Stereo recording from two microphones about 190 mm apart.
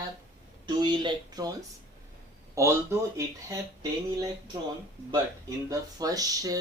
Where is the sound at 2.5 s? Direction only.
15° right (ahead or behind).